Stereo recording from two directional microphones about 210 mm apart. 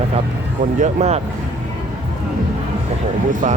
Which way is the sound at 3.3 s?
40° right (ahead or behind).